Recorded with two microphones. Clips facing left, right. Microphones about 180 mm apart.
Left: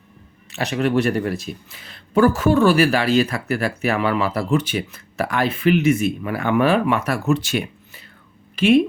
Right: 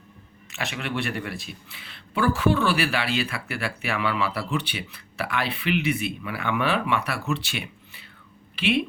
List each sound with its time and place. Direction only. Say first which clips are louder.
0.5 s speech: left 11 dB; 40° left (ahead or behind)